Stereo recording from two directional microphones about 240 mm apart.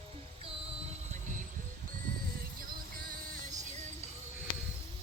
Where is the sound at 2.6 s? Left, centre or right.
Right.